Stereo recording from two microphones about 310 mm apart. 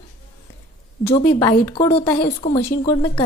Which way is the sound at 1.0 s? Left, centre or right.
Centre.